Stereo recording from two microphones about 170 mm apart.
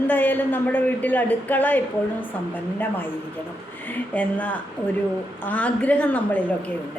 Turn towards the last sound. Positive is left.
turn(degrees=10)  # may be behind; listen again after turning